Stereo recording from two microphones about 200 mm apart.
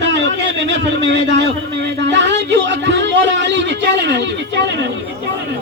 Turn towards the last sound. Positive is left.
turn(degrees=-65)  # may be behind; listen again after turning